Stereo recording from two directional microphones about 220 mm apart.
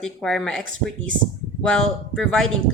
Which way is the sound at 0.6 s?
60° right (ahead or behind).